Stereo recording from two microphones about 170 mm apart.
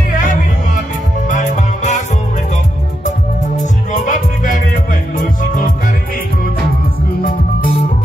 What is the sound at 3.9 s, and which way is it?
Music, 50° left (ahead or behind).